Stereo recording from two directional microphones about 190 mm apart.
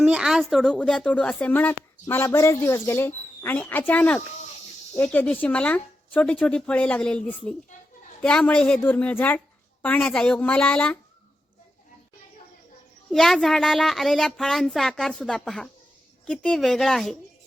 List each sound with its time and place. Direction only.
0.0 s a woman's voice: 5° right (ahead or behind)
13.1 s speech: centre (ahead or behind)